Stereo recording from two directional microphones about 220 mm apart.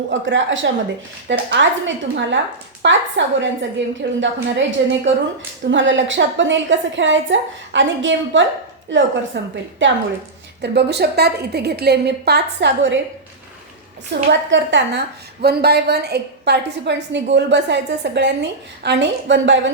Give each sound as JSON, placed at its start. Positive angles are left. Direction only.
{"t": 0.1, "sound": "a woman's voice", "side_deg": -60}
{"t": 2.8, "sound": "a woman's voice", "side_deg": -55}
{"t": 14.1, "sound": "a woman's voice", "side_deg": -55}